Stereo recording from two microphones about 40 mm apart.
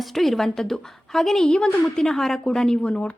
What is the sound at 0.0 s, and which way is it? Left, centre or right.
A woman's voice, centre.